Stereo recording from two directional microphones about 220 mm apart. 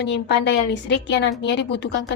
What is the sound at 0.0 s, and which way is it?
A woman's voice, 50° left (ahead or behind).